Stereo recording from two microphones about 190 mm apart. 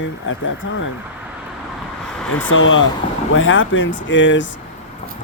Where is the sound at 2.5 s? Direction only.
90° left.